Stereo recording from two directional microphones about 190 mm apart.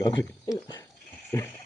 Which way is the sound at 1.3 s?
15° left (ahead or behind).